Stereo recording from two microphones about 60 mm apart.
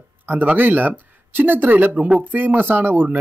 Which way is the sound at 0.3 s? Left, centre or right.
Right.